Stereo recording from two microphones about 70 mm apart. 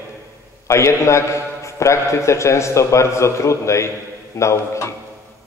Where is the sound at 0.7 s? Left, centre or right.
Left.